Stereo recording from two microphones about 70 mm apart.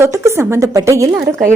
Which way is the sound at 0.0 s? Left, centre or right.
Right.